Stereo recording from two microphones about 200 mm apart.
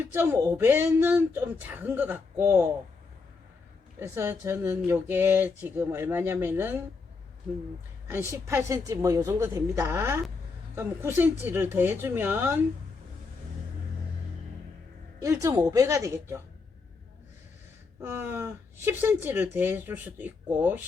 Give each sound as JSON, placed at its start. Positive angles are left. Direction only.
{"t": 0.0, "sound": "speech", "side_deg": -10}
{"t": 4.0, "sound": "speech", "side_deg": -15}
{"t": 8.0, "sound": "speech", "side_deg": -10}
{"t": 15.2, "sound": "speech", "side_deg": -15}
{"t": 18.0, "sound": "speech", "side_deg": -10}